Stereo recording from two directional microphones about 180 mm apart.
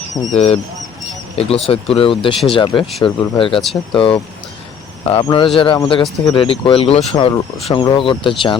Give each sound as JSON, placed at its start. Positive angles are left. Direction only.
{"t": 0.3, "sound": "speech", "side_deg": 35}